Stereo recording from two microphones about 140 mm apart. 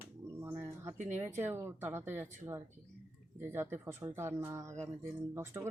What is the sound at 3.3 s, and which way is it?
Speech, 15° right (ahead or behind).